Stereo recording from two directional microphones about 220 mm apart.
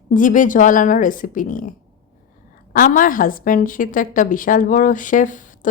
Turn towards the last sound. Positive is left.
turn(degrees=35)  # may be behind; listen again after turning